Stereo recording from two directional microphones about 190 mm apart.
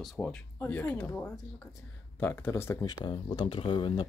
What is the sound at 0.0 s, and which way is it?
Speech, centre (ahead or behind).